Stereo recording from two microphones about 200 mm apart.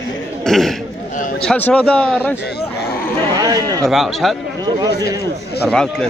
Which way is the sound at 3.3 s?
20° right (ahead or behind).